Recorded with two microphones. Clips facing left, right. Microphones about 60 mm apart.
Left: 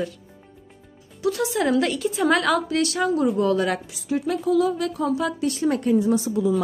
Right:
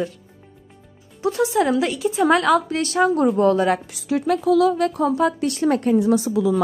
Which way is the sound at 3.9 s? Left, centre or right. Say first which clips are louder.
Right 4 dB; right.